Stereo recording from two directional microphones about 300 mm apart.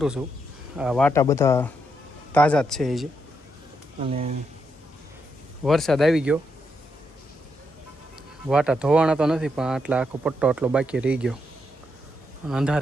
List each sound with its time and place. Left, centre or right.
0.8 s speech: centre
4.0 s speech: right
5.6 s speech: centre
8.4 s speech: centre
12.5 s speech: centre